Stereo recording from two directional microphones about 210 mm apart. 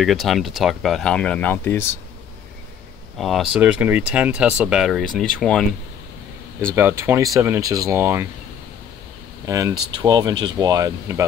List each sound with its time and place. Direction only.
0.0 s speech: centre (ahead or behind)
3.2 s speech: centre (ahead or behind)
6.7 s speech: 10° right (ahead or behind)
9.5 s speech: 15° right (ahead or behind)